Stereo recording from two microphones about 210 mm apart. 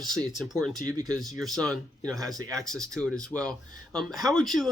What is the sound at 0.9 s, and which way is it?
Speech, 15° right (ahead or behind).